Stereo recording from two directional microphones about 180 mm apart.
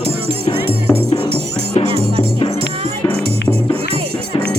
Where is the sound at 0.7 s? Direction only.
30° right (ahead or behind).